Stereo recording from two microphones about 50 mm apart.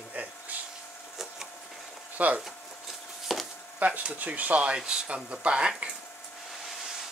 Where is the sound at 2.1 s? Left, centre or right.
Right.